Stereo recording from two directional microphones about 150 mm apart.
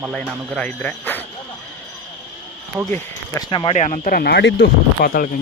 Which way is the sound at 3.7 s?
50° left (ahead or behind).